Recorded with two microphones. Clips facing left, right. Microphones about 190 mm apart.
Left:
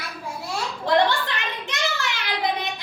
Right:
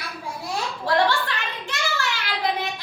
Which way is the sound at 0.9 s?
20° left (ahead or behind).